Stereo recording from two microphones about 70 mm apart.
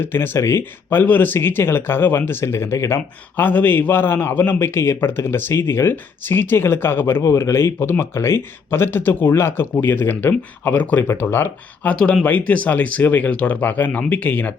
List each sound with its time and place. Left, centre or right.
0.0 s speech: left
3.3 s speech: left
7.2 s speech: left
11.9 s speech: centre